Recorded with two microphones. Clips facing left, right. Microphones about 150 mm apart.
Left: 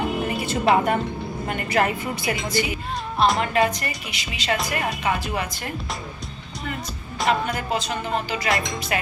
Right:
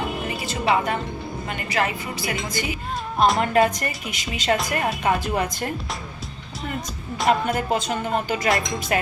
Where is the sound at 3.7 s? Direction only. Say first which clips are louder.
Right 1 dB; 45° right (ahead or behind).